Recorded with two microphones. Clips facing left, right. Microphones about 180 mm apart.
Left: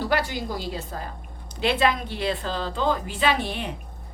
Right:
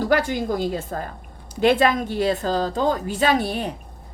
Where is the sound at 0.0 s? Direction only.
45° right (ahead or behind).